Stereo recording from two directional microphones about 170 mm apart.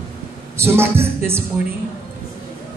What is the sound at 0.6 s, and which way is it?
Speech, 15° right (ahead or behind).